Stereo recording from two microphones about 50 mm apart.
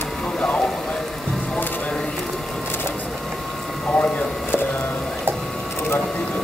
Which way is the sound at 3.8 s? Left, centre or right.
Left.